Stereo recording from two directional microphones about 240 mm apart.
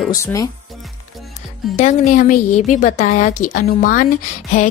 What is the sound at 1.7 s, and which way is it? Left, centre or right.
A woman's voice, left.